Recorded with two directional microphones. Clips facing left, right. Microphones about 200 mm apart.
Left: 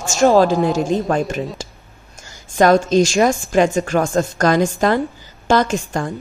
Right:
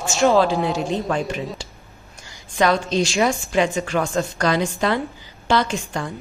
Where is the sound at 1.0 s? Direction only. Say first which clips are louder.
Left 4 dB; 45° left (ahead or behind).